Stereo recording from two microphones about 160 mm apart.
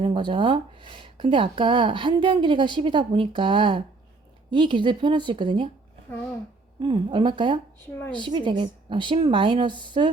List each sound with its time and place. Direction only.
0.0 s speech: 30° right (ahead or behind)
6.8 s speech: 30° right (ahead or behind)